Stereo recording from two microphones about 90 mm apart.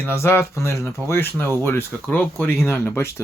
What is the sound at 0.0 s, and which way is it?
Speech, 25° left (ahead or behind).